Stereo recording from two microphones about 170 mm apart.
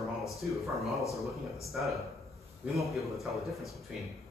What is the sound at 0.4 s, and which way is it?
A man's voice, centre (ahead or behind).